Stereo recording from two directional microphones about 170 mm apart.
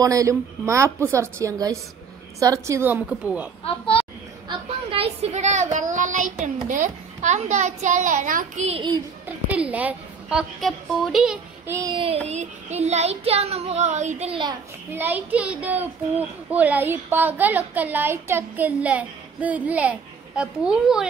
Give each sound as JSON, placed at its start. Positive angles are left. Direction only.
{"t": 0.0, "sound": "speech", "side_deg": -20}
{"t": 3.6, "sound": "a sound", "side_deg": 30}
{"t": 4.5, "sound": "speech", "side_deg": -35}
{"t": 9.5, "sound": "a woman's voice", "side_deg": -10}
{"t": 11.7, "sound": "child singing", "side_deg": -25}
{"t": 12.3, "sound": "child singing", "side_deg": -40}
{"t": 14.3, "sound": "child singing", "side_deg": -25}
{"t": 14.9, "sound": "speech", "side_deg": -10}